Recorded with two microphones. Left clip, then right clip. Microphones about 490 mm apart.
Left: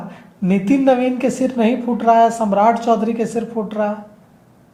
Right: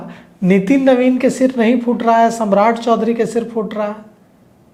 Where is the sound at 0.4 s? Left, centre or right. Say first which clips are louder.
Right 3 dB; right.